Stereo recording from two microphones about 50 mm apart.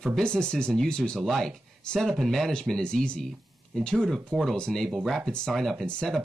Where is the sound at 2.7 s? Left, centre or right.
Centre.